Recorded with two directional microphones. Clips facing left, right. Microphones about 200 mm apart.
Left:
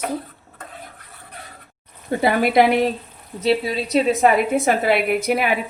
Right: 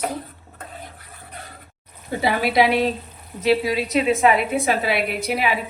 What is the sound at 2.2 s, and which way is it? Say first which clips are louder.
Speech: left 3 dB; 50° left (ahead or behind).